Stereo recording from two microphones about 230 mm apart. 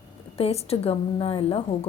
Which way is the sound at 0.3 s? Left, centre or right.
Left.